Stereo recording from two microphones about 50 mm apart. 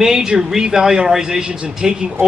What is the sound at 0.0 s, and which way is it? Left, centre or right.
A man's voice, centre.